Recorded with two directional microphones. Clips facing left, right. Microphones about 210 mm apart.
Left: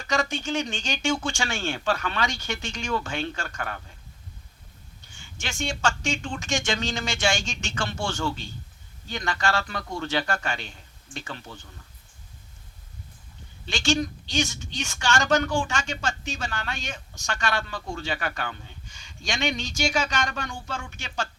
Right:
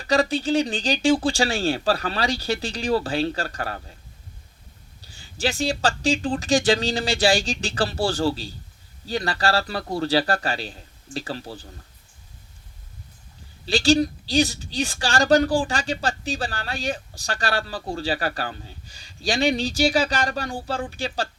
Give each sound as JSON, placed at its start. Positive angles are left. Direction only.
{"t": 0.0, "sound": "a woman's voice", "side_deg": -35}
{"t": 4.9, "sound": "a woman's voice", "side_deg": -35}
{"t": 13.7, "sound": "a woman's voice", "side_deg": -35}